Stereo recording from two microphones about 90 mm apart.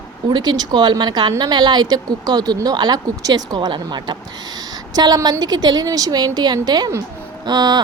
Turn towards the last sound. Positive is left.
turn(degrees=-50)  # may be behind; listen again after turning